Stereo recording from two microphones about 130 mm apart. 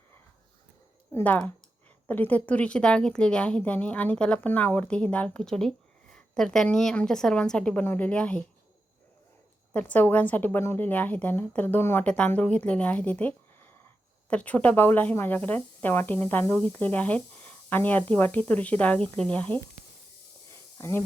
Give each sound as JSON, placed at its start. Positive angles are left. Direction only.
{"t": 1.1, "sound": "a woman's voice", "side_deg": 15}
{"t": 9.7, "sound": "a woman's voice", "side_deg": 15}
{"t": 20.5, "sound": "a sound", "side_deg": 20}